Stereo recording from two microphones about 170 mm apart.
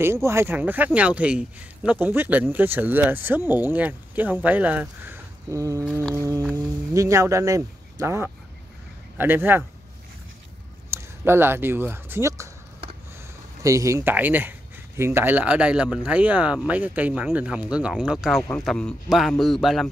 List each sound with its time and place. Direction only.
0.0 s speech: 15° right (ahead or behind)
10.9 s speech: 15° right (ahead or behind)
13.6 s speech: 20° right (ahead or behind); by 19.9 s centre (ahead or behind)